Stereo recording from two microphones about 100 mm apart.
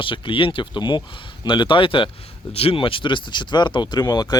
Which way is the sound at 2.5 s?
75° left (ahead or behind).